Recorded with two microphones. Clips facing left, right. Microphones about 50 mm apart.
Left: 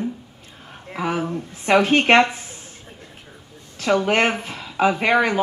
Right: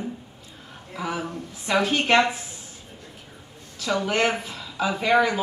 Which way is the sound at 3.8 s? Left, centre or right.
Left.